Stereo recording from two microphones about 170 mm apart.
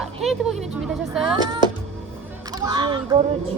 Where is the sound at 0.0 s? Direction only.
Centre (ahead or behind).